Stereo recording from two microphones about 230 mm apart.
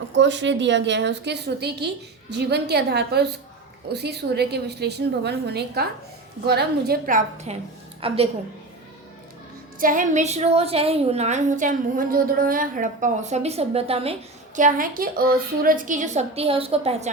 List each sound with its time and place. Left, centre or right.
0.1 s a woman's voice: right
9.7 s a woman's voice: right